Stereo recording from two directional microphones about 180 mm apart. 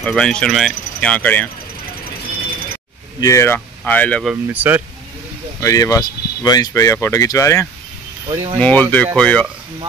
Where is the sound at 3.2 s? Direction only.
15° left (ahead or behind).